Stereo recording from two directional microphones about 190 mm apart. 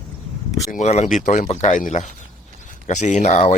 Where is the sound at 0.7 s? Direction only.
35° left (ahead or behind).